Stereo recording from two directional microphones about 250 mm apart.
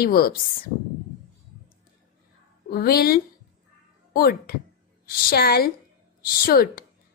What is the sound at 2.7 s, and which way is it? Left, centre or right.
A woman's voice, left.